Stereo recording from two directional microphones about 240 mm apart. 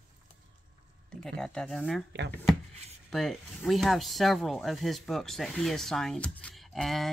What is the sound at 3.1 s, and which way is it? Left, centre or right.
Speech, centre.